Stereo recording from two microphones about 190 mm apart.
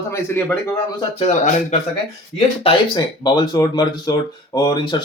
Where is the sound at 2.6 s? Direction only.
25° left (ahead or behind).